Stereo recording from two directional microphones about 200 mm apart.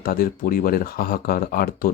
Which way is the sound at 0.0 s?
45° left (ahead or behind).